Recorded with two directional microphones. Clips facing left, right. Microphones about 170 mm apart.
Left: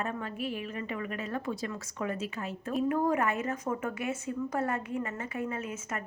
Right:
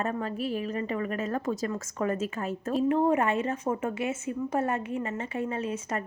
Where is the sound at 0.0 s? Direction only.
40° right (ahead or behind).